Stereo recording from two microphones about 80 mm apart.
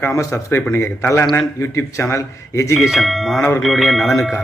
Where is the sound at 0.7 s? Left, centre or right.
Left.